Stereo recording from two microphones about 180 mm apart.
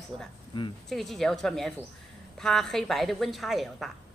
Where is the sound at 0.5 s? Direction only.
25° left (ahead or behind).